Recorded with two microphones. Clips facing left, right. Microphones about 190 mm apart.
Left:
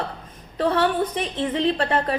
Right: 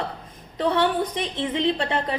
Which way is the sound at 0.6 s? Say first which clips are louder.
Left 1 dB; 20° right (ahead or behind).